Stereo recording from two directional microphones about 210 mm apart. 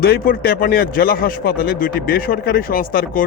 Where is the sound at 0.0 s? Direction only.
45° left (ahead or behind).